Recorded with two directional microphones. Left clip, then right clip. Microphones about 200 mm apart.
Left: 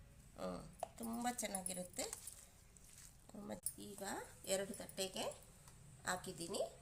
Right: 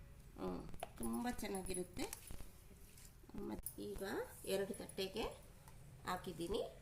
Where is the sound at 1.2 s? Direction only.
60° left (ahead or behind).